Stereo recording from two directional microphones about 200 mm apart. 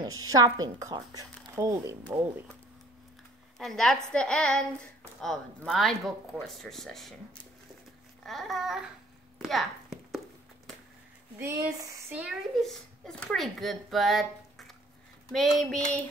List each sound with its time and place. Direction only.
0.0 s a woman's voice: 20° right (ahead or behind)
3.5 s a woman's voice: centre (ahead or behind)
8.3 s a woman's voice: centre (ahead or behind)
9.4 s a sound: centre (ahead or behind)
11.3 s a woman's voice: 15° right (ahead or behind)